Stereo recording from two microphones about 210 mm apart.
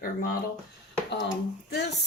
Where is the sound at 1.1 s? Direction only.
55° left (ahead or behind).